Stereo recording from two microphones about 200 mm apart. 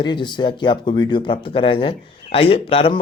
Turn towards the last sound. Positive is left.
turn(degrees=25)  # may be behind; listen again after turning